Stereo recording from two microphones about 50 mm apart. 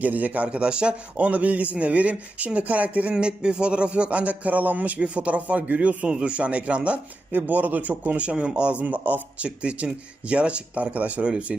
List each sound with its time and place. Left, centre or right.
0.0 s speech: right
0.4 s speech: centre
1.2 s speech: right
7.3 s speech: right
8.8 s speech: right